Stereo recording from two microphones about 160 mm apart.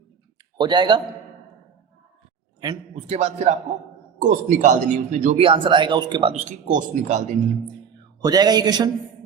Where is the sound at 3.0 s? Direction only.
45° right (ahead or behind).